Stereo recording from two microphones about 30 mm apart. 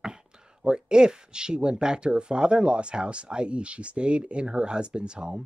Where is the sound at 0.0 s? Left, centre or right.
Right.